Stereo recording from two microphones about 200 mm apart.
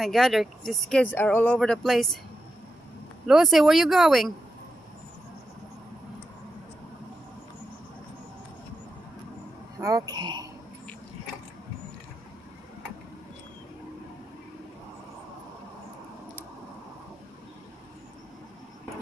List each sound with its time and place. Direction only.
0.0 s speech: centre (ahead or behind)
3.3 s speech: centre (ahead or behind)
9.8 s speech: 15° right (ahead or behind)